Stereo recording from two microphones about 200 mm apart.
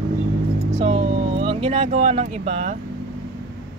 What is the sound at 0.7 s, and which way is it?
Speech, 25° right (ahead or behind).